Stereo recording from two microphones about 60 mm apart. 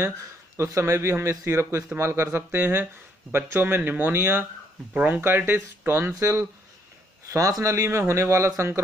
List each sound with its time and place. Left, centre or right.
0.0 s speech: right
7.2 s speech: right
7.6 s speech: right